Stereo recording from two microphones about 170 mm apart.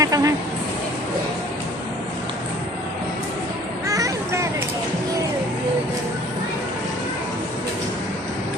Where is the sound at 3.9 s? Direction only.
20° right (ahead or behind).